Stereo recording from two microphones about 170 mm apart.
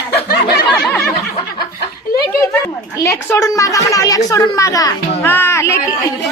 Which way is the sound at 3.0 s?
15° left (ahead or behind).